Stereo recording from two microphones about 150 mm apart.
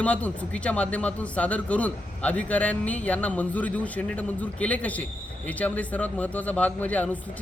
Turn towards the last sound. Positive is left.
turn(degrees=10)  # may be behind; listen again after turning